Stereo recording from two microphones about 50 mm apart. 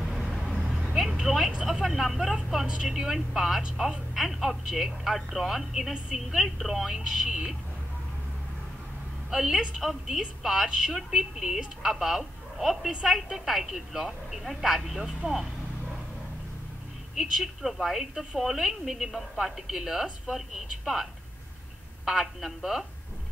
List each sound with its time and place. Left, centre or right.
0.0 s vehicle: centre
1.7 s speech: centre
2.6 s a woman's voice: centre
2.9 s a woman's voice: centre
6.9 s speech: centre
9.3 s a woman's voice: centre
17.2 s a woman's voice: centre